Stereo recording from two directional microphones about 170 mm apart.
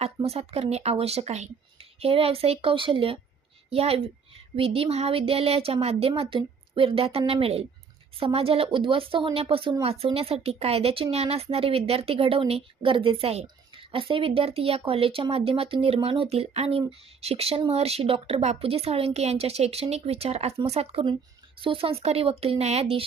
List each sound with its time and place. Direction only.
0.0 s speech: 35° right (ahead or behind)